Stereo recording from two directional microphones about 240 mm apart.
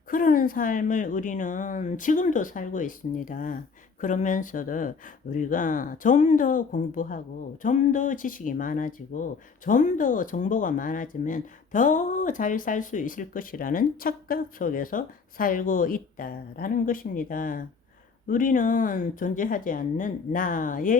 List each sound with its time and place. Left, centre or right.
0.1 s speech: left